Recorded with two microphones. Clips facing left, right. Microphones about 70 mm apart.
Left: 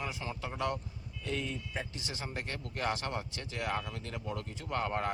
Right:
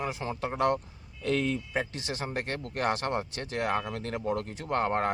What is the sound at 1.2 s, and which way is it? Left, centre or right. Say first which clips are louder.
Speech: right 9 dB; right.